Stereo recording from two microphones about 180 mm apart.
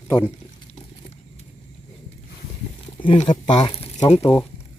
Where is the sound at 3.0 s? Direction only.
40° left (ahead or behind).